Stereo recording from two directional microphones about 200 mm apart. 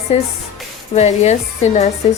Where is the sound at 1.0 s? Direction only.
35° left (ahead or behind).